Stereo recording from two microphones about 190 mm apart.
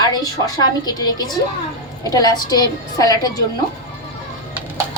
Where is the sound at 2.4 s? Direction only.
20° left (ahead or behind).